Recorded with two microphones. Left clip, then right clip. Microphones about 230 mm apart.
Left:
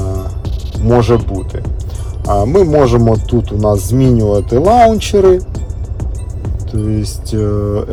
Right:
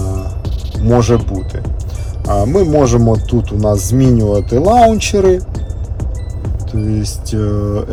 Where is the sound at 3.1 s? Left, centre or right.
Centre.